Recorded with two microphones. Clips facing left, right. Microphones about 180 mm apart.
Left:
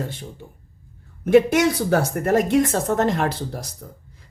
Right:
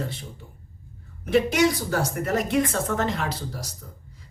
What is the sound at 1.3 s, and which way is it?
Speech, 55° left (ahead or behind).